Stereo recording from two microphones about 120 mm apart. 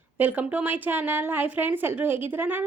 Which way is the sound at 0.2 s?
15° right (ahead or behind).